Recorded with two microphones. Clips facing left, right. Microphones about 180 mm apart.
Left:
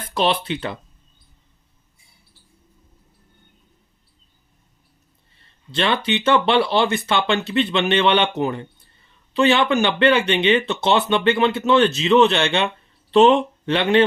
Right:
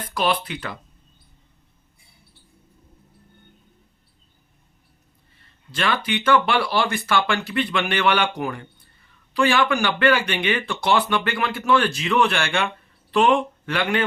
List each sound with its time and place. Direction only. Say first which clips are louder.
0.1 s speech: left 3 dB; 25° left (ahead or behind)
5.4 s a sound: left 4 dB; 25° left (ahead or behind)
6.1 s speech: left 1 dB; 25° left (ahead or behind)